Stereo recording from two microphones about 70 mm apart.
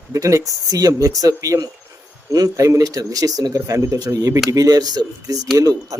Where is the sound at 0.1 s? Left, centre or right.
Right.